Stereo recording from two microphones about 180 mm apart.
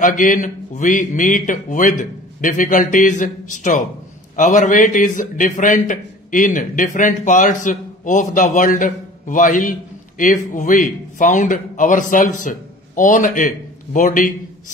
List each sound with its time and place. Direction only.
0.0 s a man's voice: 45° left (ahead or behind)